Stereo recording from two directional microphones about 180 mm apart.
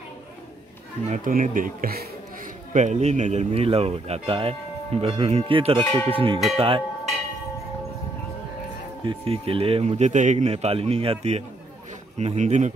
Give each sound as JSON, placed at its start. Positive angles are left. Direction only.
{"t": 1.1, "sound": "speech", "side_deg": -45}
{"t": 2.7, "sound": "speech", "side_deg": -40}
{"t": 6.5, "sound": "tubular bells", "side_deg": -30}
{"t": 9.0, "sound": "speech", "side_deg": -30}